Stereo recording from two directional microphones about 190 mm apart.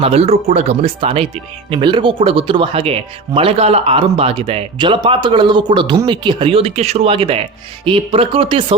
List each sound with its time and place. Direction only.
0.0 s speech: 30° right (ahead or behind)